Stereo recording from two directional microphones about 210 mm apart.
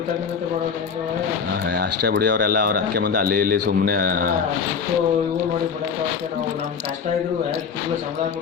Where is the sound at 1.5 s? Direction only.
50° right (ahead or behind).